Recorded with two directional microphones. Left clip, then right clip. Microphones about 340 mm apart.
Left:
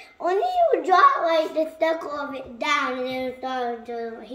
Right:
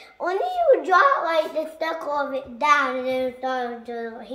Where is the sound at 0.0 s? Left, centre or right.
Centre.